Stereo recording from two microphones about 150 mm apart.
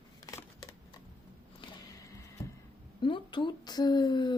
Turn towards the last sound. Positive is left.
turn(degrees=30)  # may be behind; listen again after turning